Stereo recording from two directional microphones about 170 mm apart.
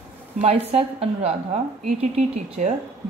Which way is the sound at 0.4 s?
35° right (ahead or behind).